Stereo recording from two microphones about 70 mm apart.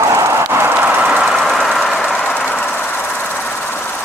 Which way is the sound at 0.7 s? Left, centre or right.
Right.